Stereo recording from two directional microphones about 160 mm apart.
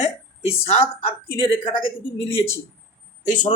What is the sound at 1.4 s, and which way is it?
Speech, 35° left (ahead or behind).